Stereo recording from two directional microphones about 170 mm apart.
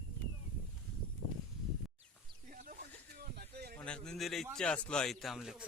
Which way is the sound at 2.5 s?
55° right (ahead or behind).